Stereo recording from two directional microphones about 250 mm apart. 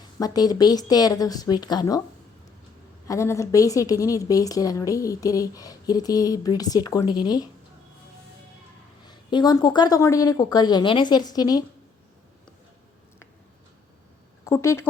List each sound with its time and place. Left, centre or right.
0.2 s a woman's voice: centre
3.1 s a woman's voice: centre
9.0 s a woman's voice: centre
14.4 s a woman's voice: centre